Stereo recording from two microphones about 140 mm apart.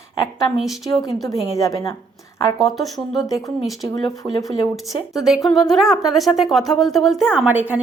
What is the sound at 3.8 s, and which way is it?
Speech, 30° left (ahead or behind).